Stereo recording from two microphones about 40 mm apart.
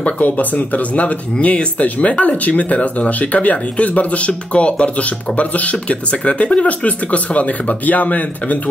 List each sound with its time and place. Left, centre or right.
0.0 s speech: left